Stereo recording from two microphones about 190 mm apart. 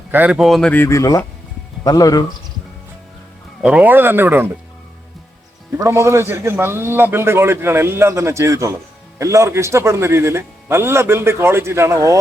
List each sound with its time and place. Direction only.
0.1 s speech: 5° right (ahead or behind); by 2.2 s 20° left (ahead or behind)
3.6 s a man's voice: 5° right (ahead or behind)
5.7 s a man's voice: 15° right (ahead or behind)